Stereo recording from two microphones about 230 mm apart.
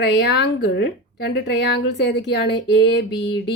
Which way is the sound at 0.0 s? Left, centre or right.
Left.